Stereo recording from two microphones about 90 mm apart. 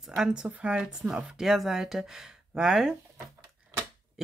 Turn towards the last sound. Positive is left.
turn(degrees=-5)  # may be behind; listen again after turning